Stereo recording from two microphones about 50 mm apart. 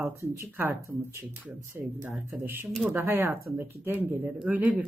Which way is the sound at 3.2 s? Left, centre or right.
Right.